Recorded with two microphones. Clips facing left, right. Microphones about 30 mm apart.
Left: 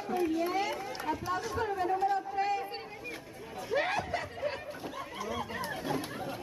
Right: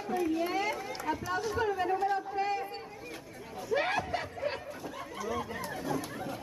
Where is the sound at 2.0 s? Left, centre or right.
Centre.